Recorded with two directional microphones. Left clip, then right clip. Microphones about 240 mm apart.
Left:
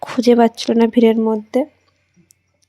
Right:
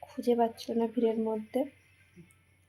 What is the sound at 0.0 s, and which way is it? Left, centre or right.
Speech, left.